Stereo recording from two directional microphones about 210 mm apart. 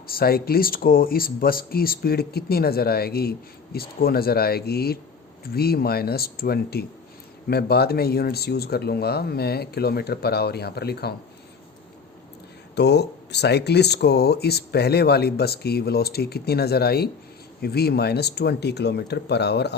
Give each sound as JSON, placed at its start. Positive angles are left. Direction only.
{"t": 0.1, "sound": "speech", "side_deg": 45}
{"t": 12.7, "sound": "speech", "side_deg": 55}